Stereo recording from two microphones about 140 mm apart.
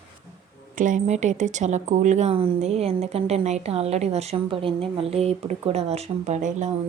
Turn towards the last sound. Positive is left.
turn(degrees=-60)  # may be behind; listen again after turning